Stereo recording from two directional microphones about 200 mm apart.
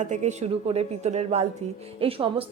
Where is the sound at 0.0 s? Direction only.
35° right (ahead or behind).